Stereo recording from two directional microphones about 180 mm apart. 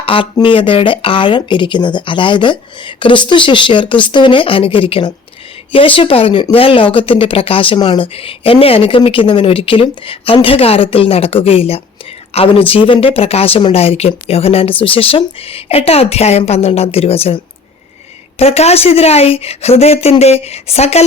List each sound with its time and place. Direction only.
0.0 s speech: 30° left (ahead or behind)